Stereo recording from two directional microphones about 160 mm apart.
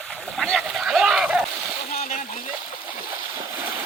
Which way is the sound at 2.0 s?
55° left (ahead or behind).